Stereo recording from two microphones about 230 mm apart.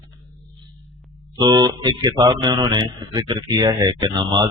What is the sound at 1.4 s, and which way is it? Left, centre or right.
Speech, centre.